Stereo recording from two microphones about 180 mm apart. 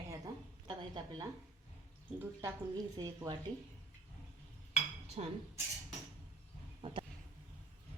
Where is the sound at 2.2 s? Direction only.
15° right (ahead or behind).